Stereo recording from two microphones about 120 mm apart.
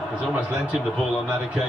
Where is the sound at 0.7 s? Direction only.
Centre (ahead or behind).